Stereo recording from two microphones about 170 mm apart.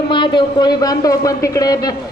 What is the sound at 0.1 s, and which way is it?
A man's voice, 25° left (ahead or behind).